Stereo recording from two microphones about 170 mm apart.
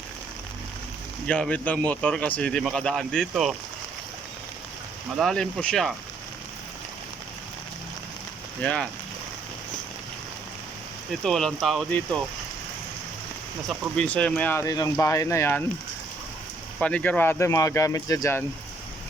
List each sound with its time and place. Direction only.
1.3 s speech: 10° left (ahead or behind)
5.1 s speech: centre (ahead or behind)
8.6 s speech: 5° left (ahead or behind)
11.1 s speech: 5° left (ahead or behind)
13.7 s speech: 5° left (ahead or behind)
16.8 s speech: 10° left (ahead or behind)